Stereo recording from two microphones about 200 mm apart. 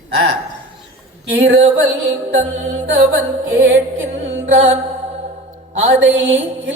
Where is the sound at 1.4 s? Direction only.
65° right (ahead or behind).